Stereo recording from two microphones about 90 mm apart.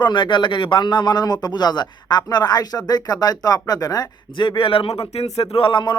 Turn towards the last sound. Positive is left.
turn(degrees=70)  # may be behind; listen again after turning